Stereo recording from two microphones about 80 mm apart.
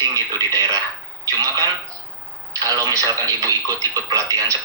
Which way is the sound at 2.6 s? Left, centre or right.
Right.